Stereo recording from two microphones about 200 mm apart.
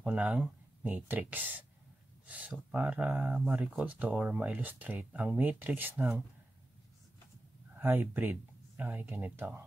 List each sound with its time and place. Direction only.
0.0 s speech: 5° right (ahead or behind)
7.7 s speech: 10° right (ahead or behind)